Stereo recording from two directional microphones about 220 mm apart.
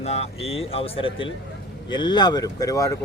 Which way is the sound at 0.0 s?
30° left (ahead or behind).